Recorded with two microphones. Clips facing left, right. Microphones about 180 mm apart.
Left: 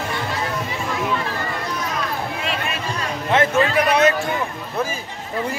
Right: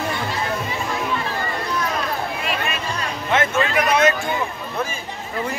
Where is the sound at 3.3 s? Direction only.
30° left (ahead or behind).